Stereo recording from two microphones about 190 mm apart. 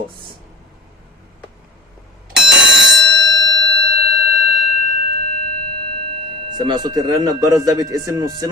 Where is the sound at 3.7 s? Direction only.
60° right (ahead or behind).